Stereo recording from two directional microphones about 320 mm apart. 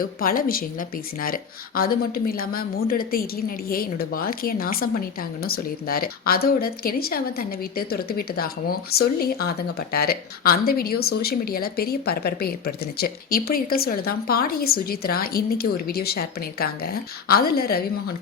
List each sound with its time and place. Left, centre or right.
0.0 s speech: left